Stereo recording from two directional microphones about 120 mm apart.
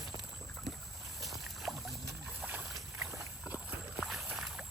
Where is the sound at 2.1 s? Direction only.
15° right (ahead or behind).